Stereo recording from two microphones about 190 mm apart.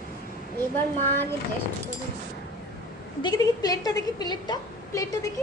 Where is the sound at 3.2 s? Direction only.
20° left (ahead or behind).